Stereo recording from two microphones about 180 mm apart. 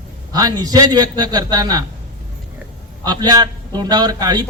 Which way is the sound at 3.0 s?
20° right (ahead or behind).